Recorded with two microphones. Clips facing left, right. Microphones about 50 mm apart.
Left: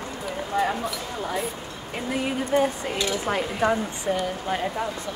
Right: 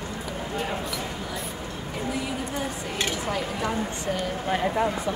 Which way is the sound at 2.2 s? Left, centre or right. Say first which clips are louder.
Left 7 dB; left.